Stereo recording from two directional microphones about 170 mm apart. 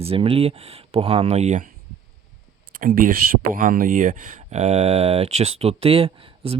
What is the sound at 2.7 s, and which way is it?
Speech, 55° right (ahead or behind).